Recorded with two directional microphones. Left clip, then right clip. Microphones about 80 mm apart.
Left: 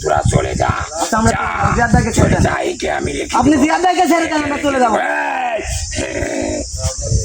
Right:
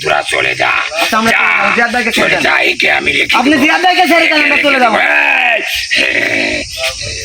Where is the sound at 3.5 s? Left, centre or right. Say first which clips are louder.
Right 1 dB; right.